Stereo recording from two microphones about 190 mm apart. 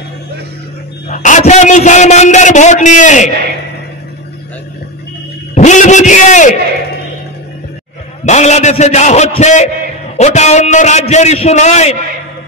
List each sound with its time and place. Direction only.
1.0 s a man's voice: 40° left (ahead or behind)
5.5 s a sound: 40° left (ahead or behind)
8.3 s a man's voice: 35° left (ahead or behind)